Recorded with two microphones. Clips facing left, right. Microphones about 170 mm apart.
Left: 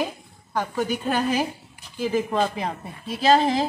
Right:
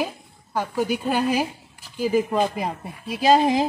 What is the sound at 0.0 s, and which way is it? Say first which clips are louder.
A woman's voice: even; 10° right (ahead or behind).